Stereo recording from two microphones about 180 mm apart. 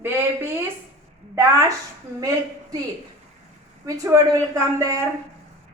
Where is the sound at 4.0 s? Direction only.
15° right (ahead or behind).